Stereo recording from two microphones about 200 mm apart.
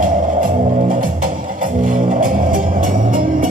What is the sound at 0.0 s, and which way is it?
Music, 45° right (ahead or behind).